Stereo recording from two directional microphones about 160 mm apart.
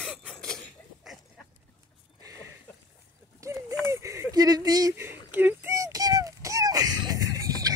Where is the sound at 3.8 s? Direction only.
20° right (ahead or behind).